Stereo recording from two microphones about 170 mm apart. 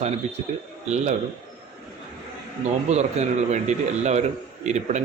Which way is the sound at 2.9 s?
40° right (ahead or behind).